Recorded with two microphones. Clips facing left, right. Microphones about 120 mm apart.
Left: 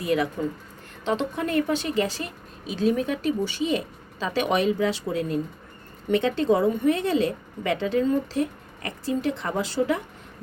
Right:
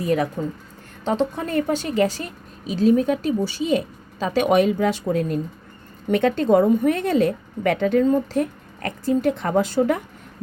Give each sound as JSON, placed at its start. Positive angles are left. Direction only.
{"t": 0.0, "sound": "a woman's voice", "side_deg": -45}